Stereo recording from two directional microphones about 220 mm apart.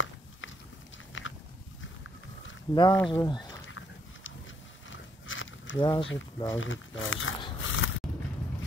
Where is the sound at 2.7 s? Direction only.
20° left (ahead or behind).